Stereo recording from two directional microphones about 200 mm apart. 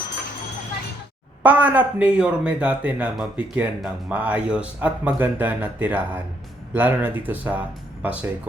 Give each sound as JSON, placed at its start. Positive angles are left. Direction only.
{"t": 1.4, "sound": "speech", "side_deg": -10}